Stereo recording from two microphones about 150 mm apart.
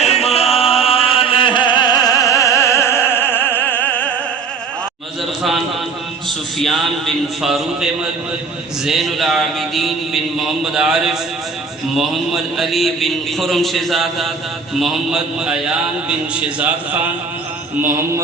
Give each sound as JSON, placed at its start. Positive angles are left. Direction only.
{"t": 0.0, "sound": "chant", "side_deg": 45}
{"t": 5.4, "sound": "a sound", "side_deg": 0}
{"t": 6.2, "sound": "mantra", "side_deg": 0}